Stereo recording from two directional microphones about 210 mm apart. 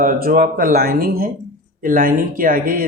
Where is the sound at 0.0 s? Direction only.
45° right (ahead or behind).